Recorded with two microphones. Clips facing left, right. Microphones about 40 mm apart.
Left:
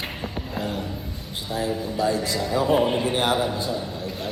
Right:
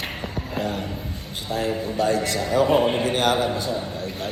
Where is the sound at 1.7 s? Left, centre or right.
Right.